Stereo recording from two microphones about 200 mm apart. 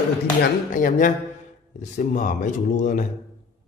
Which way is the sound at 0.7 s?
40° left (ahead or behind).